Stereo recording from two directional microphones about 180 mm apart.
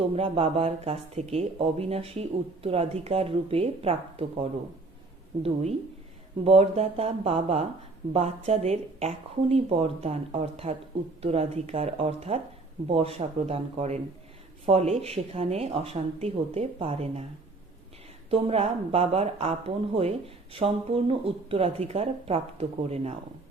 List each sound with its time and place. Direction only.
0.1 s speech: 30° right (ahead or behind)
6.4 s speech: 30° right (ahead or behind)
18.3 s speech: 35° right (ahead or behind)